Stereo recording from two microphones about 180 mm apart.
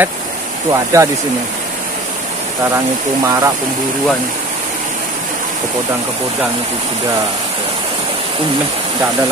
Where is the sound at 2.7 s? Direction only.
20° right (ahead or behind).